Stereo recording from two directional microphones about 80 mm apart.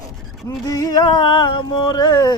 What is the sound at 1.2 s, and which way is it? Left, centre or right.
Carnatic music, left.